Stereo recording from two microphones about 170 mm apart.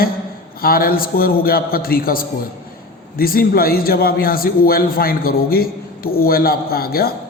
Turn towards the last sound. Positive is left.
turn(degrees=65)  # may be behind; listen again after turning